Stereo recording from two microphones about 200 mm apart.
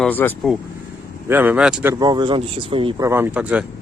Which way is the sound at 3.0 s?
10° right (ahead or behind).